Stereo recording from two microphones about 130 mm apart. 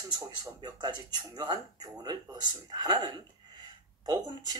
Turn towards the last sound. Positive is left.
turn(degrees=-30)  # may be behind; listen again after turning